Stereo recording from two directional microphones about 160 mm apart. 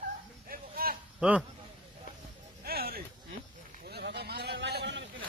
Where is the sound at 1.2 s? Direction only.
5° right (ahead or behind).